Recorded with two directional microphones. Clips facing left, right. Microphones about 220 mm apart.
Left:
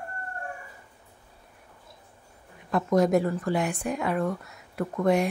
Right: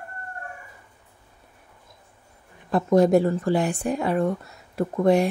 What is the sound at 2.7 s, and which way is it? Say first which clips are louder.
Speech: right 4 dB; 30° right (ahead or behind).